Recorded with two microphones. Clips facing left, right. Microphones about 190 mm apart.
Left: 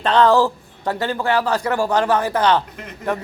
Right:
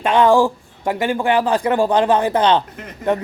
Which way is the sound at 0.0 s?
15° right (ahead or behind).